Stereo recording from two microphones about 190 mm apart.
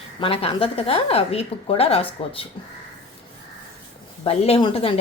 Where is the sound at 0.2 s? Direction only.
30° left (ahead or behind).